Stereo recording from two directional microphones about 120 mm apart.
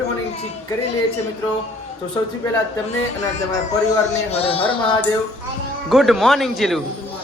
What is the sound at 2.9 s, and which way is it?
Speech, 75° left (ahead or behind).